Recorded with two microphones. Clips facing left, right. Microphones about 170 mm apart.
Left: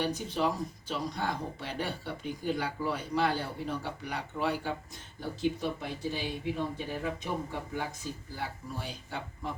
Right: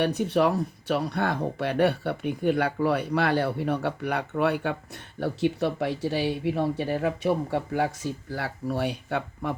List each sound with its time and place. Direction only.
0.0 s speech: 65° right (ahead or behind)